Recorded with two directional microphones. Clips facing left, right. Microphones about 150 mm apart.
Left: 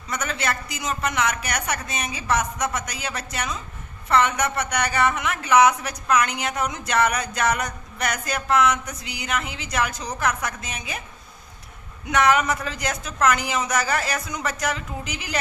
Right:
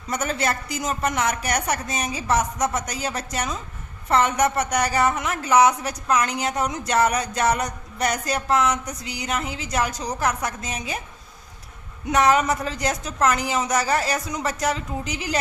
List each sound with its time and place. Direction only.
0.1 s speech: 40° right (ahead or behind)
12.0 s speech: 35° right (ahead or behind)